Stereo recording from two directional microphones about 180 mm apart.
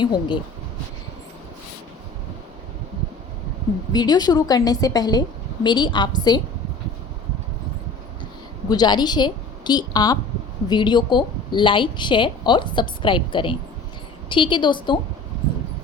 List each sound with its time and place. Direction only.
0.0 s a woman's voice: 25° left (ahead or behind)
3.9 s a woman's voice: 20° left (ahead or behind)
8.7 s a woman's voice: 25° left (ahead or behind)